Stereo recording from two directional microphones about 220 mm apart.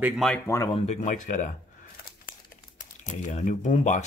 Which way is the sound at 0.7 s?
30° left (ahead or behind).